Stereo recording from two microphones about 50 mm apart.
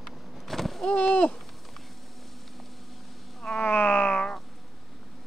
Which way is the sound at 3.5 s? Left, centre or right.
Left.